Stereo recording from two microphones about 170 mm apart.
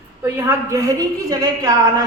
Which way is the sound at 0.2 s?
15° right (ahead or behind).